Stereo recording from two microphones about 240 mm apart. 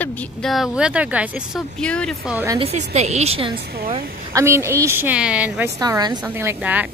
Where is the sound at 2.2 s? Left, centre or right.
Centre.